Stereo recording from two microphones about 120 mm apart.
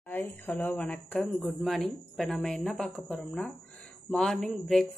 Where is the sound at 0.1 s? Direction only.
15° left (ahead or behind).